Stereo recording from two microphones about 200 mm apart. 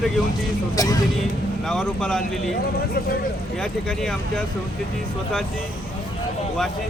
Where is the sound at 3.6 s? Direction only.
5° left (ahead or behind).